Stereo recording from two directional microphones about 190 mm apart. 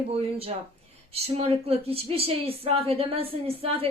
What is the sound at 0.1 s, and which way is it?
Speech, 30° right (ahead or behind).